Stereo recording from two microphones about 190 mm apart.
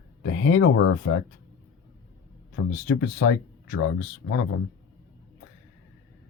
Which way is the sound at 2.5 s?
65° left (ahead or behind).